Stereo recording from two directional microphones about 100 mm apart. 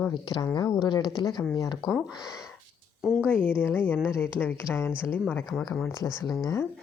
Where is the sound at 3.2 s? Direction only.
20° left (ahead or behind).